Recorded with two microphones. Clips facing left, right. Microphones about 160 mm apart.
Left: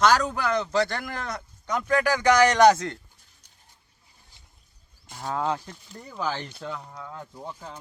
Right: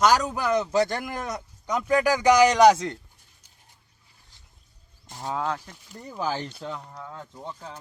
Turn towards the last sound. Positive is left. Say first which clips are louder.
# even
turn(degrees=5)  # may be behind; listen again after turning